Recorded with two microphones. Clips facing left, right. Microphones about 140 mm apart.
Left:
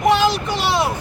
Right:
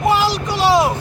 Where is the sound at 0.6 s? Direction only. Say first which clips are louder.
Right 7 dB; 40° right (ahead or behind).